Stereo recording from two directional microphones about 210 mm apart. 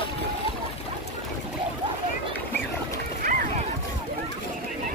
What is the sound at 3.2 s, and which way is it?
Dog, 40° right (ahead or behind).